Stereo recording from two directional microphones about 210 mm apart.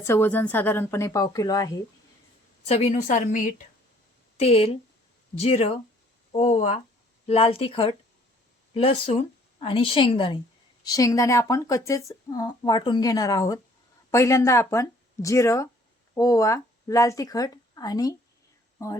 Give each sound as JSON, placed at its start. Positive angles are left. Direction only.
{"t": 0.0, "sound": "speech", "side_deg": 10}
{"t": 2.6, "sound": "a woman's voice", "side_deg": 30}
{"t": 9.0, "sound": "a woman's voice", "side_deg": 25}